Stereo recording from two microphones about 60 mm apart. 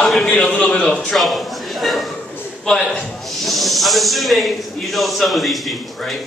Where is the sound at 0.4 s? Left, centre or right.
Centre.